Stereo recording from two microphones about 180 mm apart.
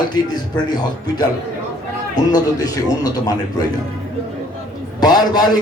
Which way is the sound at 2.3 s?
20° left (ahead or behind).